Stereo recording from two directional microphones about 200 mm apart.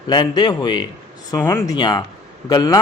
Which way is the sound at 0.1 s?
20° left (ahead or behind).